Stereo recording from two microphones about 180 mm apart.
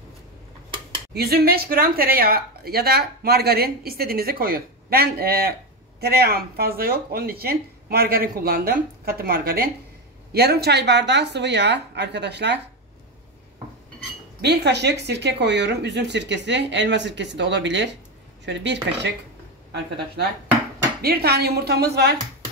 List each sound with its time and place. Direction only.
1.1 s speech: 60° right (ahead or behind)
14.4 s speech: 70° right (ahead or behind)
20.2 s speech: 65° right (ahead or behind)